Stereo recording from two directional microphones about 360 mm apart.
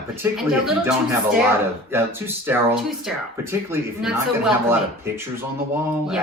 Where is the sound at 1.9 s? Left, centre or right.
Centre.